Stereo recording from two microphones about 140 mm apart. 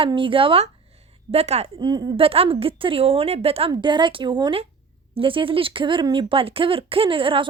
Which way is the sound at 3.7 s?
35° right (ahead or behind).